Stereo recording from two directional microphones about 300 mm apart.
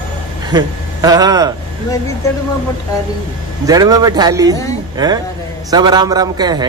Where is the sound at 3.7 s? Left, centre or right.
Centre.